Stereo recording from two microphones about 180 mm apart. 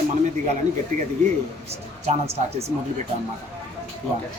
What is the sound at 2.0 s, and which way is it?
Speech, 35° right (ahead or behind).